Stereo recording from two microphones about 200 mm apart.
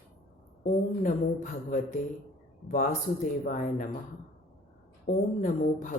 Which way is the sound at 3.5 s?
40° left (ahead or behind).